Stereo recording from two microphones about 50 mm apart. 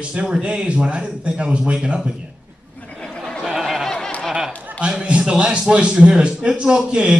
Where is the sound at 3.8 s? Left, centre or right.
Centre.